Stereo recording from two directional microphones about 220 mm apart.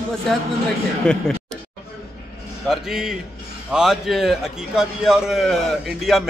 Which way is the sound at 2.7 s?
Centre (ahead or behind).